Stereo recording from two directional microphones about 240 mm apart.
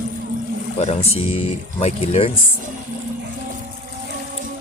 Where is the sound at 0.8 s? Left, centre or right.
Left.